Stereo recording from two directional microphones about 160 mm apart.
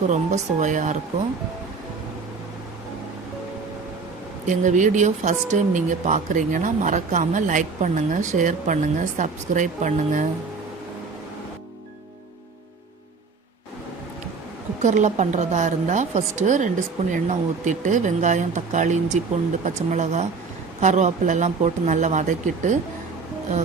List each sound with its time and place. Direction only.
0.1 s speech: 50° right (ahead or behind)
4.4 s speech: 50° right (ahead or behind)
14.8 s speech: 50° right (ahead or behind)